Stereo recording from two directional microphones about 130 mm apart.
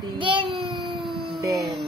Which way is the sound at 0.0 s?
40° right (ahead or behind).